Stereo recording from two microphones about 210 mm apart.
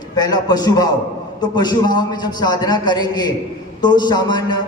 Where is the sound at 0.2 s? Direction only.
20° left (ahead or behind).